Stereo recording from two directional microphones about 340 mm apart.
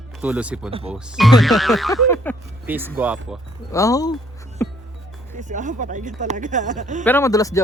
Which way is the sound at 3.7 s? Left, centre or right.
Centre.